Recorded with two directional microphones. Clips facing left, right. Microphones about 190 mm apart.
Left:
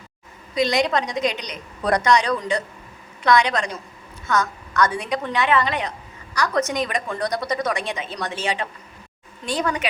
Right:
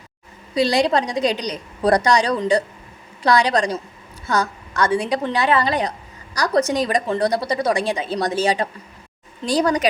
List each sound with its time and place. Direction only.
0.5 s speech: 30° right (ahead or behind)